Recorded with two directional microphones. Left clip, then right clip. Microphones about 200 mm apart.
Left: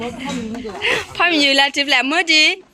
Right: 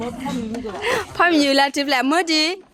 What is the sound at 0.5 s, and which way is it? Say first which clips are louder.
Speech: left 3 dB; 30° right (ahead or behind).